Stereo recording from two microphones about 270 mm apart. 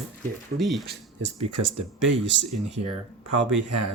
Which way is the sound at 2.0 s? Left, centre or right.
Right.